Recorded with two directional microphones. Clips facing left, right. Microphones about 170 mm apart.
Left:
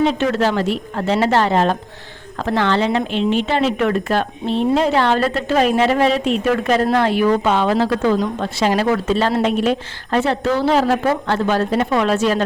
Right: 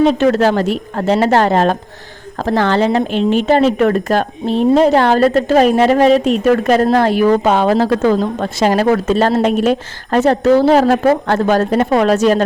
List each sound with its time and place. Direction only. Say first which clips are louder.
0.0 s a woman's voice: right 5 dB; 40° right (ahead or behind)